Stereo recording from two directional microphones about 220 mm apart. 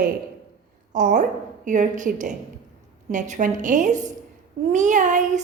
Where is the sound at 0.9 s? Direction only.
35° right (ahead or behind).